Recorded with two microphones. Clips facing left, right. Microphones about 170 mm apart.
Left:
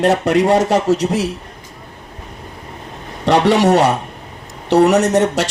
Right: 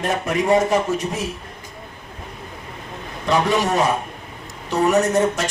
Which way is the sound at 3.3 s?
75° left (ahead or behind).